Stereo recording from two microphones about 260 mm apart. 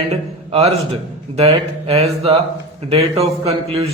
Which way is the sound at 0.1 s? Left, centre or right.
Right.